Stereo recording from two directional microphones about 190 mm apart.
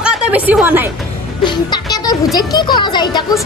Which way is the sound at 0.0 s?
5° right (ahead or behind).